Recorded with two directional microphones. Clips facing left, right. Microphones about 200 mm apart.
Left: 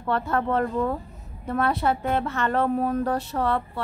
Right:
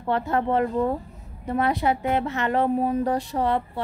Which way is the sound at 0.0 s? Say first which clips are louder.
Right 1 dB; 20° right (ahead or behind).